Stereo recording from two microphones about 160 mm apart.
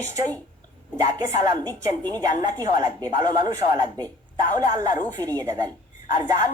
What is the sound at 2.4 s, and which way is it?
A man's voice, 25° right (ahead or behind).